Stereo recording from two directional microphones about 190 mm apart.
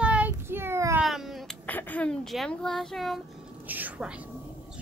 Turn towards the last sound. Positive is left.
turn(degrees=-5)  # may be behind; listen again after turning